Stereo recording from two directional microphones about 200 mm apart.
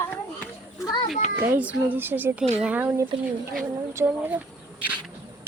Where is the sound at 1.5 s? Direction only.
10° right (ahead or behind).